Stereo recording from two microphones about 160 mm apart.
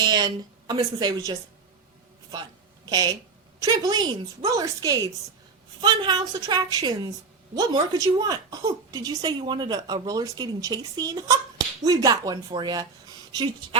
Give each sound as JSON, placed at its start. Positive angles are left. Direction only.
{"t": 0.0, "sound": "a woman's voice", "side_deg": -25}